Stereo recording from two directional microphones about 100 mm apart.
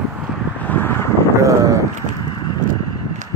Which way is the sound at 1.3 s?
30° right (ahead or behind).